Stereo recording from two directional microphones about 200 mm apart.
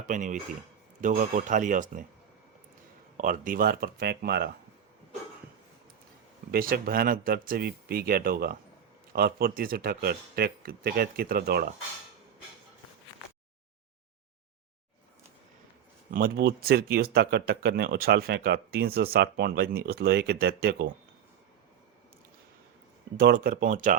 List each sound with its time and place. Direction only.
0.1 s speech: 40° right (ahead or behind)
3.2 s speech: 40° right (ahead or behind)
6.5 s speech: 45° right (ahead or behind)
16.1 s speech: 50° right (ahead or behind)
23.1 s speech: 50° right (ahead or behind)